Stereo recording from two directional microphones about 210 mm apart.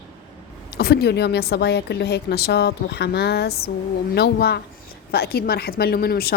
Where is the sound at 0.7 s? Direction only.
50° left (ahead or behind).